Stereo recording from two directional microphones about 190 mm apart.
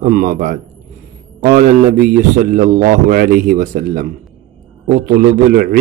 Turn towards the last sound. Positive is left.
turn(degrees=-50)  # may be behind; listen again after turning